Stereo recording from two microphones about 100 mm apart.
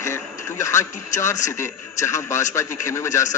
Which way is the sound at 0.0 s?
30° left (ahead or behind).